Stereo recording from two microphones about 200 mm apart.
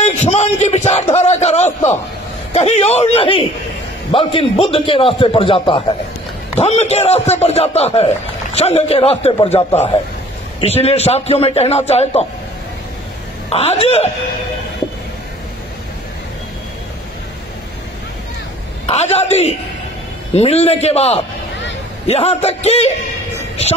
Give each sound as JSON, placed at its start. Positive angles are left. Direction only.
{"t": 0.0, "sound": "a man's voice", "side_deg": 35}
{"t": 10.6, "sound": "a man's voice", "side_deg": 30}
{"t": 13.5, "sound": "a man's voice", "side_deg": 30}
{"t": 18.9, "sound": "a man's voice", "side_deg": 30}